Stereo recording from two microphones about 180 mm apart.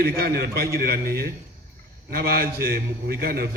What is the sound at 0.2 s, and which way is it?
A man's voice, 60° right (ahead or behind).